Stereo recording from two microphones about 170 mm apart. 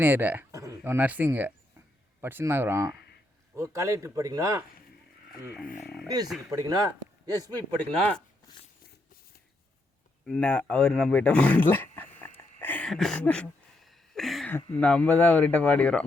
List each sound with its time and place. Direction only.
0.0 s a man's voice: 10° right (ahead or behind)
6.5 s a man's voice: 20° right (ahead or behind)
7.8 s speech: 5° left (ahead or behind)
10.2 s speech: 5° left (ahead or behind)